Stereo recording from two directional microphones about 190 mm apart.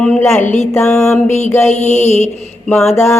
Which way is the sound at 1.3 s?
35° left (ahead or behind).